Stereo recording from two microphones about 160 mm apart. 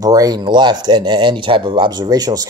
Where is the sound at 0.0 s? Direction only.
25° right (ahead or behind).